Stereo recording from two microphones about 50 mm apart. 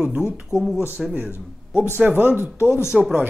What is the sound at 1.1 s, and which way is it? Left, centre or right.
Speech, right.